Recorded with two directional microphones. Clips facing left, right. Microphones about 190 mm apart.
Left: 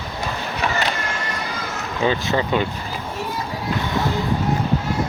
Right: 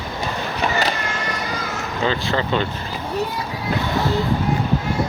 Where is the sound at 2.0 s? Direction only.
15° left (ahead or behind).